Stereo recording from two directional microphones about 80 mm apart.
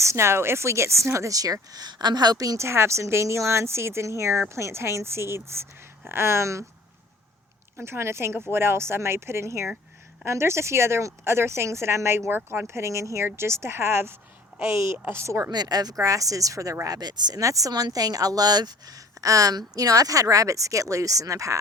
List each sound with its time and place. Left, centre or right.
0.0 s speech: right
1.7 s speech: right
2.6 s speech: right
7.8 s speech: right
14.9 s speech: right
15.2 s speech: right
15.4 s speech: right
16.0 s speech: right
16.8 s speech: right
17.4 s speech: right